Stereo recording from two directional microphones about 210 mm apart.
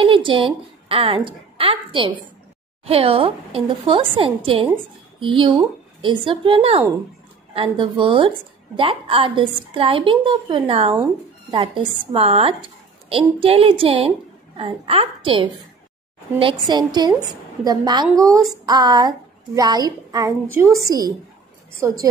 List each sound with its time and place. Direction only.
0.0 s a woman's voice: 25° right (ahead or behind)